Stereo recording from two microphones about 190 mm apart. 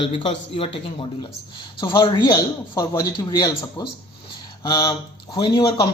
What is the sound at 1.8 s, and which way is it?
Speech, 25° left (ahead or behind).